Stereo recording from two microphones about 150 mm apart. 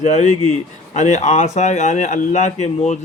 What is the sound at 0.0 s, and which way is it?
Speech, 50° left (ahead or behind).